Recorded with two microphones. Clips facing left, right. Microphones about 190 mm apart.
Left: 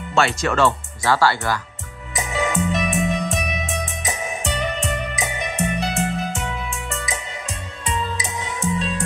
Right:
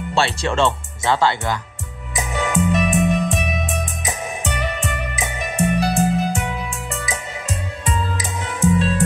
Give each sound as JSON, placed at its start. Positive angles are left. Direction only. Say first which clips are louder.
{"t": 0.1, "sound": "speech", "louder": "left 1 dB", "side_deg": -30}
{"t": 2.1, "sound": "music", "louder": "right 1 dB", "side_deg": 0}